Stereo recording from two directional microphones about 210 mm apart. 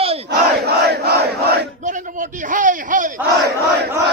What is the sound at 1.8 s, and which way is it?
A man's voice, 40° right (ahead or behind).